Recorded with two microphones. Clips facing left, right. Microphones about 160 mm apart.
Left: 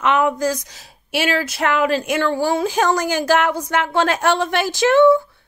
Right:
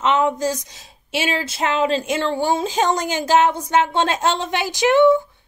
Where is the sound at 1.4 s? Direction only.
25° right (ahead or behind).